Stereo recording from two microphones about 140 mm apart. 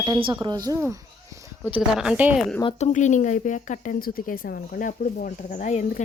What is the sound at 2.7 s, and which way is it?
Speech, 55° left (ahead or behind).